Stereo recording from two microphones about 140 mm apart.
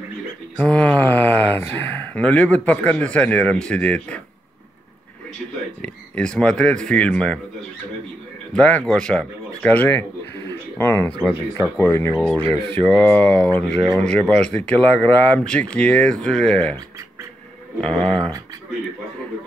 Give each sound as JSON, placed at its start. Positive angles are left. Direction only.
{"t": 0.6, "sound": "speech", "side_deg": 5}
{"t": 5.8, "sound": "speech", "side_deg": 5}
{"t": 8.5, "sound": "a man's voice", "side_deg": 5}
{"t": 17.7, "sound": "a man's voice", "side_deg": 5}